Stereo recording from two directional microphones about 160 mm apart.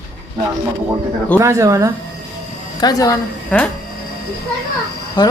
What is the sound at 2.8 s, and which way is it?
Speech, 25° left (ahead or behind).